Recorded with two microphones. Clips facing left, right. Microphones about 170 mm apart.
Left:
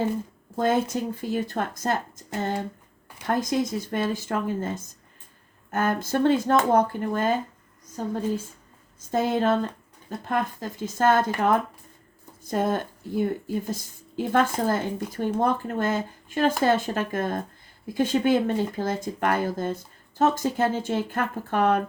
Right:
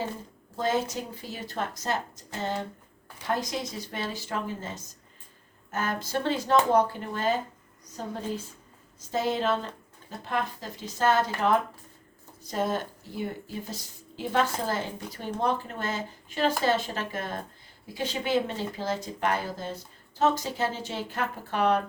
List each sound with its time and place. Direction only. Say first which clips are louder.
0.5 s a woman's voice: left 5 dB; 55° left (ahead or behind)
9.0 s a woman's voice: left 4 dB; 50° left (ahead or behind)
12.4 s a woman's voice: left 4 dB; 50° left (ahead or behind)